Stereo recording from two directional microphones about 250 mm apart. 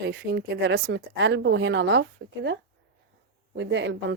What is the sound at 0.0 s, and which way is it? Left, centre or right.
Speech, right.